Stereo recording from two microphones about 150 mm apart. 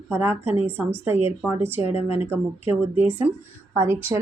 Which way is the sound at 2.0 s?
40° left (ahead or behind).